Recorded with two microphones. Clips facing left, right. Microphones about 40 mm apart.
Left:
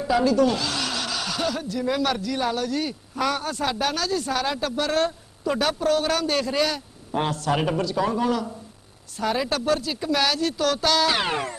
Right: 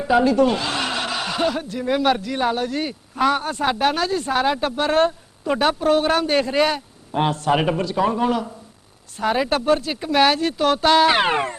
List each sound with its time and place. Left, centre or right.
0.0 s speech: right